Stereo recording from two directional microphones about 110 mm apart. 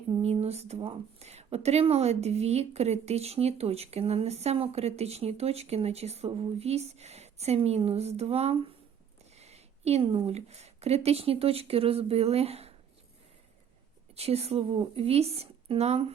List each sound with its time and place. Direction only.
0.2 s a sound: 70° right (ahead or behind)
1.2 s speech: 75° right (ahead or behind)
14.2 s speech: 65° right (ahead or behind)